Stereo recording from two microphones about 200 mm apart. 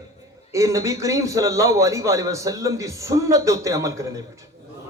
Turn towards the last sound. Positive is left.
turn(degrees=-15)  # may be behind; listen again after turning